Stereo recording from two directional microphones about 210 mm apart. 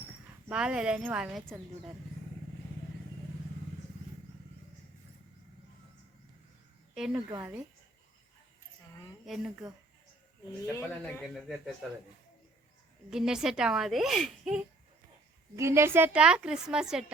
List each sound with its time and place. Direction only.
0.4 s a child's voice: 5° right (ahead or behind)
6.9 s a sound: 5° right (ahead or behind)
7.3 s speech: 20° right (ahead or behind)
9.2 s a child's voice: centre (ahead or behind)
10.8 s speech: 10° left (ahead or behind)
11.2 s a child's voice: centre (ahead or behind)
13.1 s a child's voice: 5° right (ahead or behind)
15.5 s a child's voice: 15° right (ahead or behind)